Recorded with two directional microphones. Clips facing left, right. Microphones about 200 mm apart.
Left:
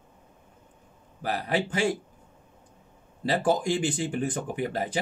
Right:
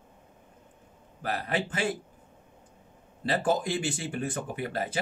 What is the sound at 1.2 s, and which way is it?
Speech, 15° left (ahead or behind).